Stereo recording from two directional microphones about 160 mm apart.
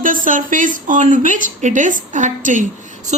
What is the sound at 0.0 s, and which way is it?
A woman's voice, 55° right (ahead or behind).